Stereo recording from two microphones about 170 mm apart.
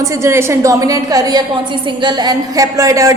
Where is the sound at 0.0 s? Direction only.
15° right (ahead or behind).